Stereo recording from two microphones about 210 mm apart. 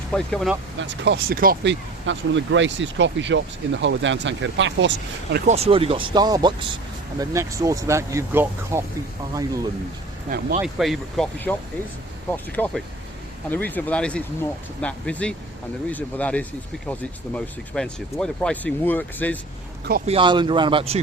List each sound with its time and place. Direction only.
0.1 s speech: centre (ahead or behind)
0.8 s speech: 60° right (ahead or behind)
2.0 s speech: 60° right (ahead or behind)
5.5 s speech: 30° right (ahead or behind)
10.2 s speech: 40° right (ahead or behind)
10.6 s speech: centre (ahead or behind)
12.5 s speech: 5° left (ahead or behind)
20.1 s speech: 25° right (ahead or behind)